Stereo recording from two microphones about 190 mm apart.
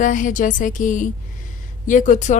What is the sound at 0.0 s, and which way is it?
A woman's voice, 40° left (ahead or behind).